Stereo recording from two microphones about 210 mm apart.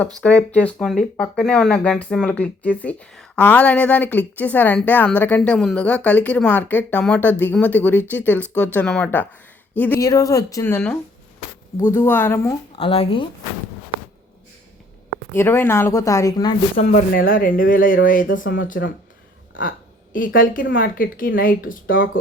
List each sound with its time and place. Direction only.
0.2 s speech: 5° left (ahead or behind)
12.7 s speech: 25° left (ahead or behind)
15.3 s speech: 10° left (ahead or behind)
16.8 s speech: 35° left (ahead or behind)
18.4 s speech: 65° left (ahead or behind)
19.5 s speech: 40° left (ahead or behind)